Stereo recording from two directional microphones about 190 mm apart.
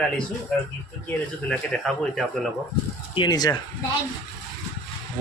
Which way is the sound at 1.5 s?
5° left (ahead or behind).